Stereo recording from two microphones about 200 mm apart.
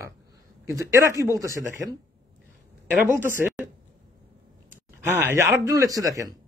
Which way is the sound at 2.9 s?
10° right (ahead or behind).